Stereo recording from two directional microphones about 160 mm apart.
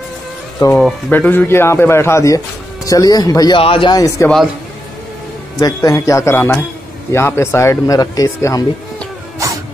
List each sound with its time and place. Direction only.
0.6 s a man's voice: 20° left (ahead or behind)
3.5 s speech: 35° left (ahead or behind)
5.6 s a man's voice: 25° left (ahead or behind)
9.4 s wail: 20° right (ahead or behind)